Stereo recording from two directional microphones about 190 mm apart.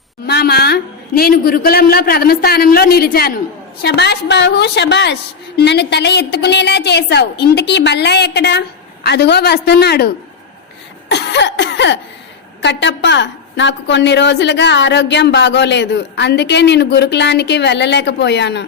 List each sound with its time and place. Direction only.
0.3 s a woman's voice: 55° left (ahead or behind)
11.1 s cough: 65° left (ahead or behind)
12.6 s a woman's voice: 65° left (ahead or behind)